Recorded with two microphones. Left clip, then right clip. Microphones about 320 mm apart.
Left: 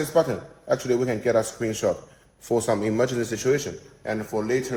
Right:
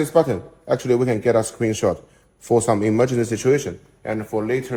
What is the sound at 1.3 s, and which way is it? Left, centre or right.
A man's voice, centre.